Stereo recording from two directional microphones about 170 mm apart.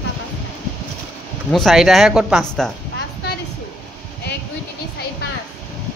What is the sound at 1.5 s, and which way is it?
Speech, centre (ahead or behind).